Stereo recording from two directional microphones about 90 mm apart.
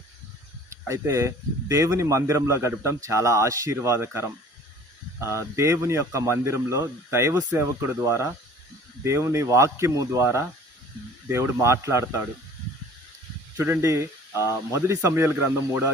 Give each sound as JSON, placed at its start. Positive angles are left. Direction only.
{"t": 0.7, "sound": "speech", "side_deg": -35}
{"t": 11.3, "sound": "speech", "side_deg": -30}
{"t": 13.6, "sound": "speech", "side_deg": -30}